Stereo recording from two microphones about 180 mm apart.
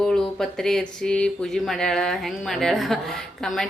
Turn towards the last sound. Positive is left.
turn(degrees=0)  # may be behind; listen again after turning